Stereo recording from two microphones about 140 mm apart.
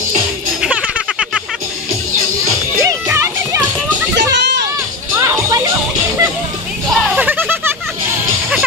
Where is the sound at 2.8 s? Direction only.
20° right (ahead or behind).